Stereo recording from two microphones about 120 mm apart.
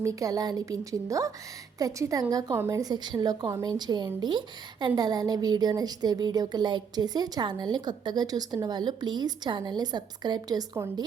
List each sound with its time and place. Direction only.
0.0 s a woman's voice: 30° right (ahead or behind)